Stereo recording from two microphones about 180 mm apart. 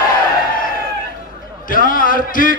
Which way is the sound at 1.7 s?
50° left (ahead or behind).